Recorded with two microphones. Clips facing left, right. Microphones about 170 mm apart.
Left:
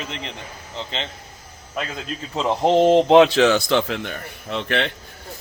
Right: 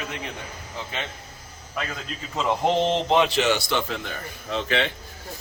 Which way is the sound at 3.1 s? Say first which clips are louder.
Left 7 dB; 90° left.